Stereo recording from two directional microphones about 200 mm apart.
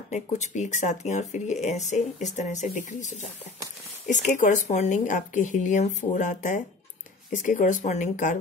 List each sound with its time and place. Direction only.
0.1 s speech: 35° left (ahead or behind)
4.1 s speech: 40° left (ahead or behind)